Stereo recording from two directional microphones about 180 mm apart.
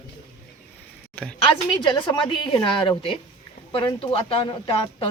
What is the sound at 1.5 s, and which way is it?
A woman's voice, 25° left (ahead or behind).